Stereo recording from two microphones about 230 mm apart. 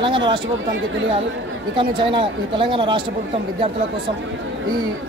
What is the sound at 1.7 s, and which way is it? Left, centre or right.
Speech, right.